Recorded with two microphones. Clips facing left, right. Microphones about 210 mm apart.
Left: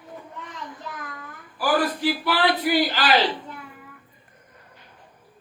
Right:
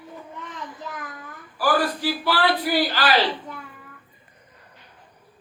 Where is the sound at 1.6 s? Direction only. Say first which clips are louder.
Even; 20° left (ahead or behind).